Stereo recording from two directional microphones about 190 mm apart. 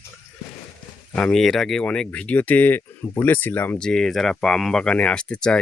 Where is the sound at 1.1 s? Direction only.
5° left (ahead or behind).